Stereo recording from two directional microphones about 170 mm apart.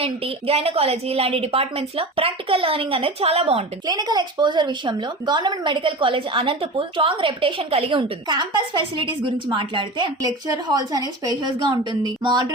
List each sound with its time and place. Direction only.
0.0 s a woman's voice: 35° right (ahead or behind)